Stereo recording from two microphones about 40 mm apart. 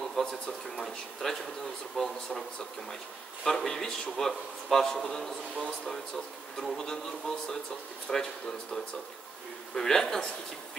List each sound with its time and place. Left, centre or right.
0.2 s a man's voice: centre
3.4 s a man's voice: centre
9.8 s a man's voice: centre